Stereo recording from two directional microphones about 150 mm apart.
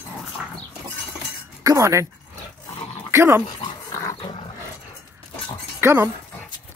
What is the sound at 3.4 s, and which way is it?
Dog, 25° left (ahead or behind).